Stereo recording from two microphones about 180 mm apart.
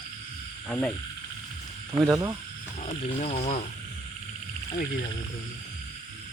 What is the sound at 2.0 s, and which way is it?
Speech, 20° right (ahead or behind).